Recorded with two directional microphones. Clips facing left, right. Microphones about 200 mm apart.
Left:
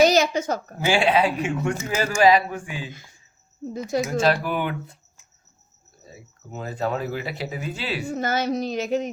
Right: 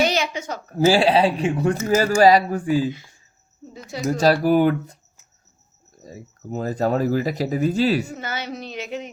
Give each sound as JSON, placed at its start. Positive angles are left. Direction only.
{"t": 0.0, "sound": "a sound", "side_deg": 40}
{"t": 0.8, "sound": "speech", "side_deg": -35}
{"t": 3.7, "sound": "speech", "side_deg": 45}
{"t": 4.0, "sound": "speech", "side_deg": -35}
{"t": 6.0, "sound": "speech", "side_deg": -40}
{"t": 8.1, "sound": "speech", "side_deg": 45}